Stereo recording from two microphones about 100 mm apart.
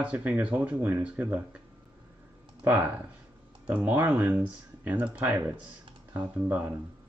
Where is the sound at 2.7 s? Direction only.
20° right (ahead or behind).